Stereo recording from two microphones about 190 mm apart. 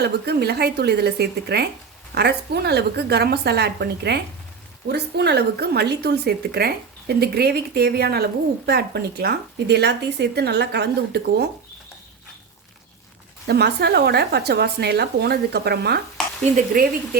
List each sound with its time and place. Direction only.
0.0 s speech: 60° right (ahead or behind)
13.5 s speech: 60° right (ahead or behind)